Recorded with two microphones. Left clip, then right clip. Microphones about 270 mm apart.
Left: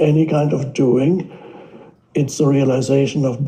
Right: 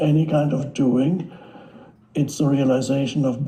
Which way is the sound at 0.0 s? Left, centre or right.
Left.